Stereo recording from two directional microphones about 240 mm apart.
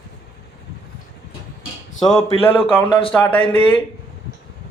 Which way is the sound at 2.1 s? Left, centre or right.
Left.